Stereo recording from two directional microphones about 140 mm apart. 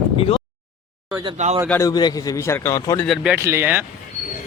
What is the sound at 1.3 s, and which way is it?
Speech, 55° right (ahead or behind).